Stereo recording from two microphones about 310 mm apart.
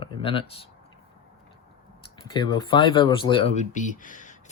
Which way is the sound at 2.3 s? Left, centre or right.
Centre.